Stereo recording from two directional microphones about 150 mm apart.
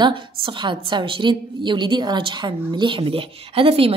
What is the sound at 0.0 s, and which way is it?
A woman's voice, 35° right (ahead or behind).